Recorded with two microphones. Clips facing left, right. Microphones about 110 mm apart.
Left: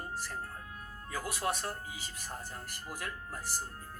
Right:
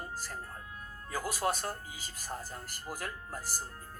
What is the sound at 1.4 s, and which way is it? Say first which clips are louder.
Speech: right 1 dB; 25° right (ahead or behind).